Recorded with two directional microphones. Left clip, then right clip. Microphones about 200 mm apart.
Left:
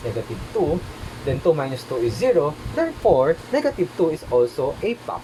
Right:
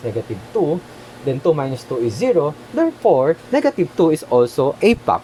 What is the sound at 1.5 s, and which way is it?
Speech, 40° right (ahead or behind).